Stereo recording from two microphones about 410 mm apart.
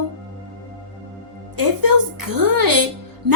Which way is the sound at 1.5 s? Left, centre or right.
Right.